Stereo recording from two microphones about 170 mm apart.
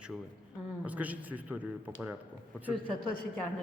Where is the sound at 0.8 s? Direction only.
10° right (ahead or behind).